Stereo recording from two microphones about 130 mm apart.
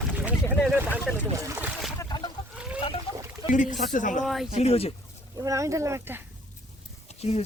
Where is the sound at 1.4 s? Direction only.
20° right (ahead or behind).